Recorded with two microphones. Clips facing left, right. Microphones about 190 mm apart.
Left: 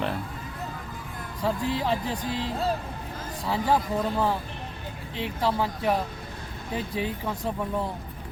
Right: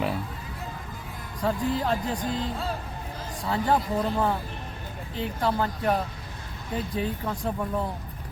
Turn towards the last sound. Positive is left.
turn(degrees=0)  # may be behind; listen again after turning